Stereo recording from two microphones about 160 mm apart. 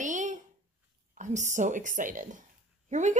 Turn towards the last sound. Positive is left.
turn(degrees=-50)  # may be behind; listen again after turning